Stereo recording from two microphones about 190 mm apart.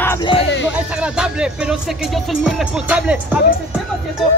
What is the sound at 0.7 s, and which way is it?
Speech, 5° right (ahead or behind).